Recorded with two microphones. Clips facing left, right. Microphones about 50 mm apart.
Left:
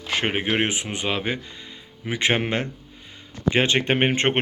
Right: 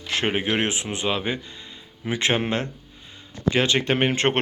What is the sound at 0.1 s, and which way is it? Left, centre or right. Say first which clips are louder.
Speech: even; left.